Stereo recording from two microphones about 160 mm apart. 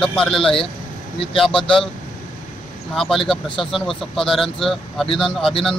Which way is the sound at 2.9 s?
Centre (ahead or behind).